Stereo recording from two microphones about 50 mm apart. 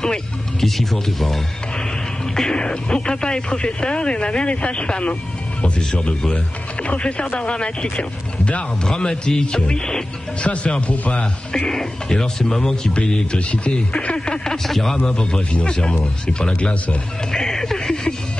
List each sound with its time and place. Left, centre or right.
0.0 s speech: centre
2.3 s speech: centre
6.0 s speech: left
11.5 s speech: centre
15.0 s speech: centre
17.3 s speech: centre